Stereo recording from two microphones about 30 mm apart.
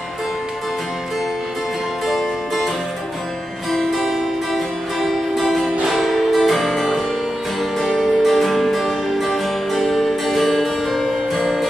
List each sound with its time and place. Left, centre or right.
2.0 s music: centre
3.9 s music: centre
8.0 s music: centre
8.3 s music: centre
9.7 s music: centre